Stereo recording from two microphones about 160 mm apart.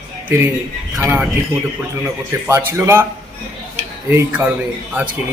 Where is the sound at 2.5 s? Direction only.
15° right (ahead or behind).